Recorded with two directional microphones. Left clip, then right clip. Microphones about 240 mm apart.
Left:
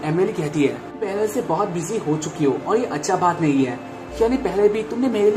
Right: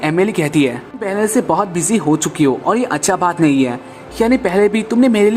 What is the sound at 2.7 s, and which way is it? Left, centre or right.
Speech, right.